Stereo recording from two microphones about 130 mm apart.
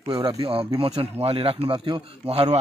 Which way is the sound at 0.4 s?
45° right (ahead or behind).